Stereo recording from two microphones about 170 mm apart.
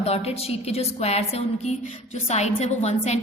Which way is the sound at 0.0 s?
35° left (ahead or behind).